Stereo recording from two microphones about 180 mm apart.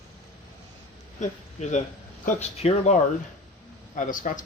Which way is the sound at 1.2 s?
40° left (ahead or behind).